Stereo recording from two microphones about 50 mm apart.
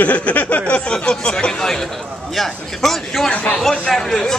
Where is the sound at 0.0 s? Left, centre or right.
Left.